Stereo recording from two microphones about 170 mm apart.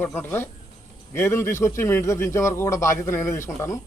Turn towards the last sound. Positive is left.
turn(degrees=15)  # may be behind; listen again after turning